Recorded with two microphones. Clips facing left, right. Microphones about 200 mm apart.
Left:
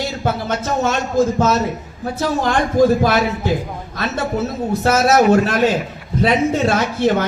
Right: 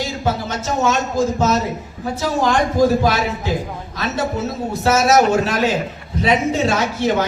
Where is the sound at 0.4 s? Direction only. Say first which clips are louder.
Even; 50° left (ahead or behind).